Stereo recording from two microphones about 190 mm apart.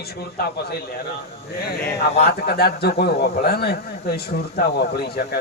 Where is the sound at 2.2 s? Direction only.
55° left (ahead or behind).